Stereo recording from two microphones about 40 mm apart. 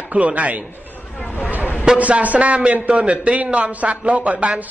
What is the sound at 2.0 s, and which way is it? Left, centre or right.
A man's voice, right.